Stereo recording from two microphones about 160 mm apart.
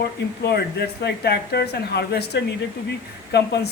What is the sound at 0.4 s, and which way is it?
A man's voice, 90° left.